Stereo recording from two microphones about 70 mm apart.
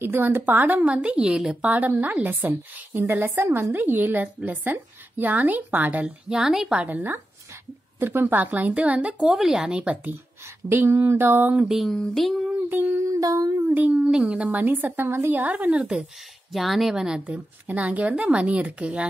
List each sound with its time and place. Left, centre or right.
0.0 s speech: right; by 1.6 s centre
1.6 s speech: right
6.0 s speech: centre
6.8 s speech: right
10.7 s speech: right
11.5 s speech: centre
11.9 s speech: centre
12.6 s speech: right
13.0 s humming: right
13.7 s speech: right
13.9 s speech: centre; by 15.3 s right
15.3 s speech: right
16.5 s speech: centre
17.3 s speech: right